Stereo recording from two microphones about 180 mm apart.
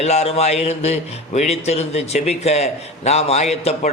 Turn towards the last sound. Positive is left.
turn(degrees=35)  # may be behind; listen again after turning